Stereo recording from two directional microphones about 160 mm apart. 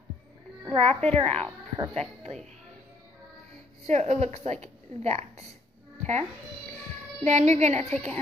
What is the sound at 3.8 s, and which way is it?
A woman's voice, 45° right (ahead or behind).